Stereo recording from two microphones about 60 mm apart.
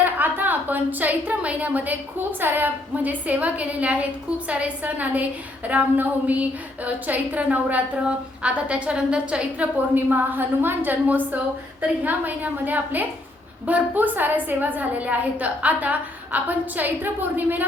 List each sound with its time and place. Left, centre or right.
0.0 s a woman's voice: right
9.9 s a woman's voice: right